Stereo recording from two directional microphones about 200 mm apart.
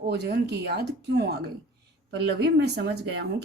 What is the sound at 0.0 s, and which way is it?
A woman's voice, 55° right (ahead or behind).